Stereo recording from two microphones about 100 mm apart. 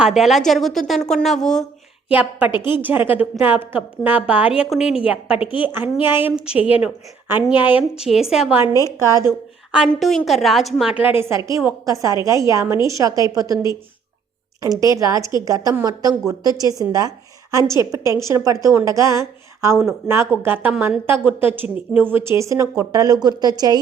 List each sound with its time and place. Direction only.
0.0 s a woman's voice: 5° right (ahead or behind)
2.0 s a woman's voice: 15° right (ahead or behind)
2.5 s a woman's voice: 50° left (ahead or behind)
2.7 s a woman's voice: 20° right (ahead or behind)
6.3 s a woman's voice: 10° right (ahead or behind)
8.1 s a woman's voice: 5° right (ahead or behind)
8.7 s a woman's voice: 30° left (ahead or behind)
9.7 s a woman's voice: centre (ahead or behind)
10.9 s a woman's voice: 20° right (ahead or behind); by 23.8 s 45° right (ahead or behind)